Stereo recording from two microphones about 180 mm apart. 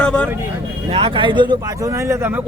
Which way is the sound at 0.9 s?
30° right (ahead or behind).